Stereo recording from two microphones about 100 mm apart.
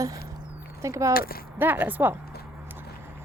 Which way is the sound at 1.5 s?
20° right (ahead or behind).